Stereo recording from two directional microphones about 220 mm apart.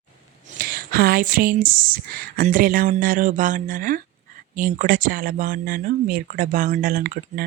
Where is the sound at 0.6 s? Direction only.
40° right (ahead or behind).